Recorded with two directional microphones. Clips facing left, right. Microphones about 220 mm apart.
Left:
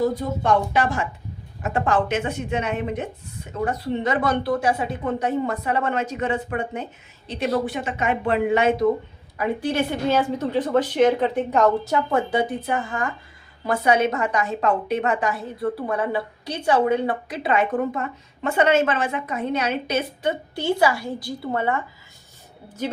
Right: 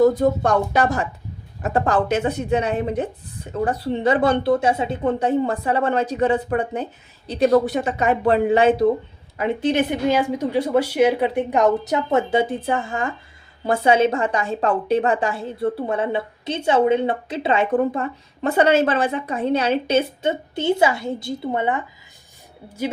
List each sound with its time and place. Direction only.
0.0 s speech: 45° right (ahead or behind)
9.4 s a woman's voice: 20° right (ahead or behind)